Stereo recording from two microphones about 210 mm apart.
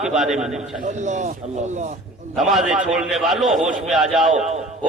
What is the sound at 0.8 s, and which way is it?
Speech, 35° right (ahead or behind).